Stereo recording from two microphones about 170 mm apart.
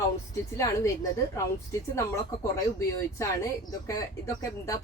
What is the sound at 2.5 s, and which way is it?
Speech, 20° left (ahead or behind).